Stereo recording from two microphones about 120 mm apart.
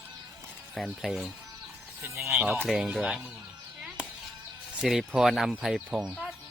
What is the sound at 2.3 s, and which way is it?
Speech, 5° right (ahead or behind).